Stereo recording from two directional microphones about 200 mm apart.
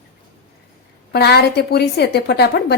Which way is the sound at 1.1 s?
55° left (ahead or behind).